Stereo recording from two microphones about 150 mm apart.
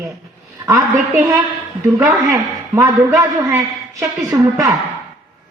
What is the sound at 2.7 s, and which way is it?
A woman's voice, 20° right (ahead or behind).